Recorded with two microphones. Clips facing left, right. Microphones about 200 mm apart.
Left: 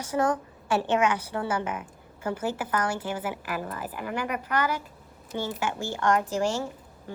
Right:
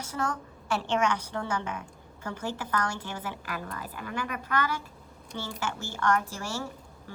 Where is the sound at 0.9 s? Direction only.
10° left (ahead or behind).